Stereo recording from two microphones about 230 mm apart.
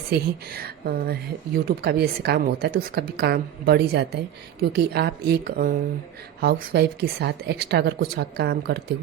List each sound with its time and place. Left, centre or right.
0.5 s speech: right